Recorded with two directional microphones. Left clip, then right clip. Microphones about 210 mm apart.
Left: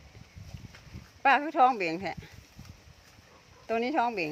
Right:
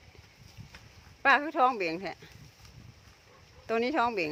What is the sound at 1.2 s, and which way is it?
Speech, centre (ahead or behind).